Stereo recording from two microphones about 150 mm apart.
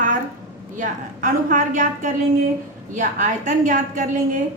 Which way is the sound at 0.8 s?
60° right (ahead or behind).